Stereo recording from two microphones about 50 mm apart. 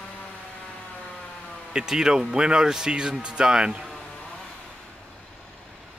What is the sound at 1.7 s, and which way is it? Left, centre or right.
Speech, centre.